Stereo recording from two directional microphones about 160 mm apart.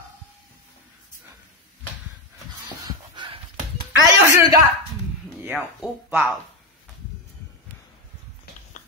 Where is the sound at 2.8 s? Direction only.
30° right (ahead or behind).